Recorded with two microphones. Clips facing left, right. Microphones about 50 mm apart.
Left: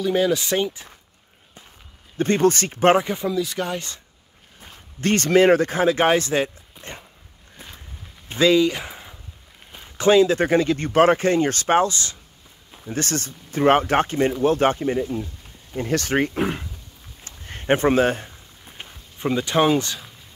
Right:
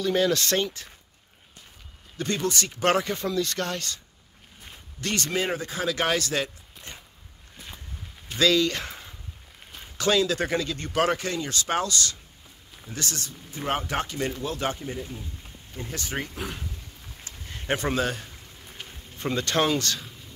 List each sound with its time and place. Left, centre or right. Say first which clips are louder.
0.0 s speech: left 3 dB; centre
2.1 s speech: left 9 dB; left
2.9 s speech: left 5 dB; centre
4.6 s speech: left 4 dB; left
5.8 s speech: left 8 dB; left
8.3 s speech: left 5 dB; left
9.9 s speech: left 8 dB; left
12.9 s speech: left 8 dB; left
15.8 s speech: left 11 dB; left
16.3 s speech: left 11 dB; left
17.2 s a sound: left 3 dB; left
18.9 s speech: left 6 dB; centre